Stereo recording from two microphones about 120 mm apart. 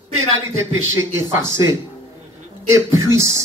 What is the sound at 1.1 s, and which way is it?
Speech, 25° right (ahead or behind).